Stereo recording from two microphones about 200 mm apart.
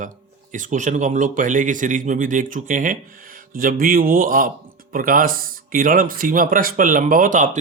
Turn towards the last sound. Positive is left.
turn(degrees=-40)  # may be behind; listen again after turning